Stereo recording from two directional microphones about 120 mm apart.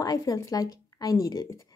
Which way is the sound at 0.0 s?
30° left (ahead or behind).